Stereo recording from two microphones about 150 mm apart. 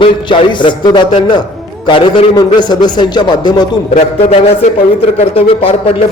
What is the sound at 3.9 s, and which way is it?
Speech, 50° left (ahead or behind).